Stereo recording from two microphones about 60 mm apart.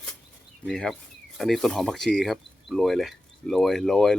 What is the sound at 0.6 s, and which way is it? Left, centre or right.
Speech, centre.